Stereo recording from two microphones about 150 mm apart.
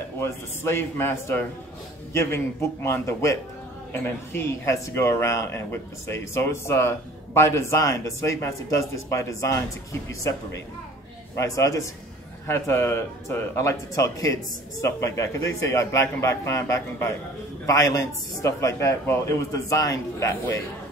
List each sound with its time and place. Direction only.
0.2 s a man's voice: 15° left (ahead or behind)
11.3 s speech: 20° left (ahead or behind)